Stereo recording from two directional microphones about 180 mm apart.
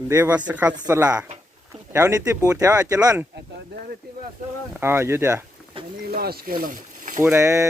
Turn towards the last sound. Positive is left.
turn(degrees=-15)  # may be behind; listen again after turning